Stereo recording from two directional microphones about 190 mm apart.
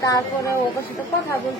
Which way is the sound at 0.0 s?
20° left (ahead or behind).